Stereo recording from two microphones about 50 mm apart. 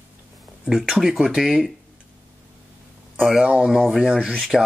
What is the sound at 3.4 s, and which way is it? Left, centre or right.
Speech, right.